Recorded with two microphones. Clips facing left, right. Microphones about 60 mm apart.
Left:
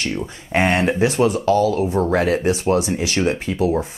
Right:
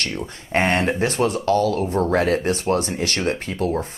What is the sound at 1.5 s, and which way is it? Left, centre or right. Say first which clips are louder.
Speech: left 1 dB; right.